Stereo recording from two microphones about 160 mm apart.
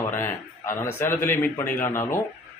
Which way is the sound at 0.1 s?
15° left (ahead or behind).